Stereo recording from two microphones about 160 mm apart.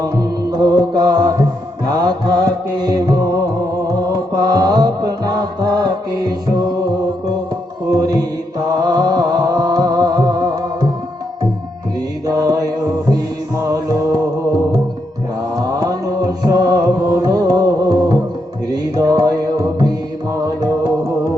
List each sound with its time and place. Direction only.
0.0 s music: 25° right (ahead or behind)
7.9 s mantra: 25° right (ahead or behind)
8.8 s music: 25° right (ahead or behind)
12.2 s mantra: 20° right (ahead or behind)
13.6 s music: 20° right (ahead or behind)
15.8 s music: 20° right (ahead or behind)